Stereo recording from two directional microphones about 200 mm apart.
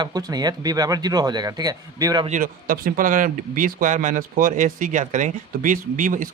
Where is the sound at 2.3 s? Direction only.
45° right (ahead or behind).